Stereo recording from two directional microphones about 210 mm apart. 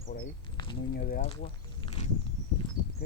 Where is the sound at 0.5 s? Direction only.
25° left (ahead or behind).